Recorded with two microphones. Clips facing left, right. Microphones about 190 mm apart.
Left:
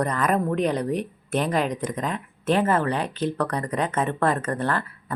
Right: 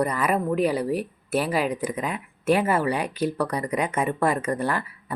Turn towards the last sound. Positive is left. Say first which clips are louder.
# even
turn(degrees=-10)  # may be behind; listen again after turning